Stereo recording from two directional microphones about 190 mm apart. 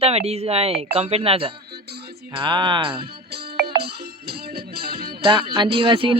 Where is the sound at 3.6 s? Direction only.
55° right (ahead or behind).